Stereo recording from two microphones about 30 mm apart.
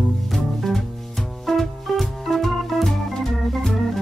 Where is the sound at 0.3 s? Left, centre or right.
Centre.